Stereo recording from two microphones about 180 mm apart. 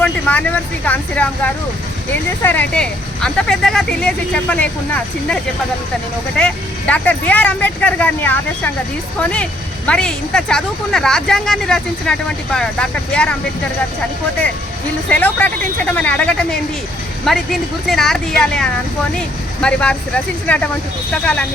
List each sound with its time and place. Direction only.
0.0 s speech: 10° left (ahead or behind)
6.4 s speech: 5° left (ahead or behind)
15.1 s speech: 10° left (ahead or behind)